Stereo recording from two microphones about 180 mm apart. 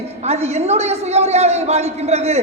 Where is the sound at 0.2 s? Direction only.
35° right (ahead or behind).